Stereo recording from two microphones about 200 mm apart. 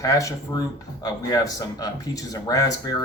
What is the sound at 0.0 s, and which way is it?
Speech, 15° left (ahead or behind).